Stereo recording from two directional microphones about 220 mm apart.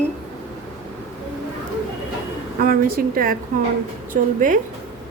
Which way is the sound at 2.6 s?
40° right (ahead or behind).